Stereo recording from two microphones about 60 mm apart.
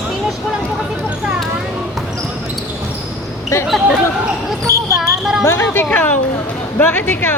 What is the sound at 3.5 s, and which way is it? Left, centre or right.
Speech, left.